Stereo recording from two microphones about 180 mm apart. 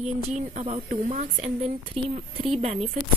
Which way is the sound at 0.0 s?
40° right (ahead or behind).